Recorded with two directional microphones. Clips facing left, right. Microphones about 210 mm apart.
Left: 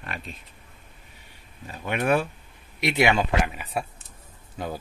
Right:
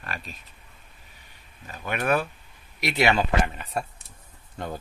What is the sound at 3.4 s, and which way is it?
A man's voice, 5° left (ahead or behind).